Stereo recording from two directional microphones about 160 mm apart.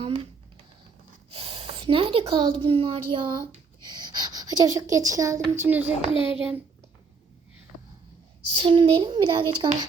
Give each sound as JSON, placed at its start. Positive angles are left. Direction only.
{"t": 0.0, "sound": "a sound", "side_deg": -35}
{"t": 1.3, "sound": "speech", "side_deg": -35}
{"t": 6.1, "sound": "a child's voice", "side_deg": 35}
{"t": 8.5, "sound": "a child's voice", "side_deg": -30}